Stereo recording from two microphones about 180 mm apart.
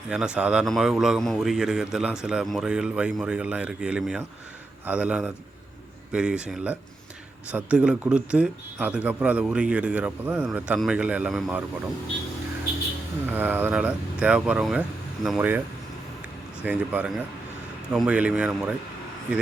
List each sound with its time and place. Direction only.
0.3 s a man's voice: 5° right (ahead or behind)
13.3 s speech: 10° right (ahead or behind)
16.6 s a man's voice: 10° right (ahead or behind)